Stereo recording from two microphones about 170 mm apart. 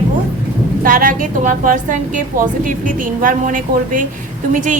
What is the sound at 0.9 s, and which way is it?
A woman's voice, 55° right (ahead or behind).